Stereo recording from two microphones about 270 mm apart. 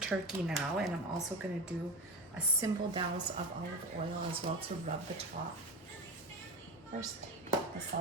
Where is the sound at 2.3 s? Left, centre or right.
Centre.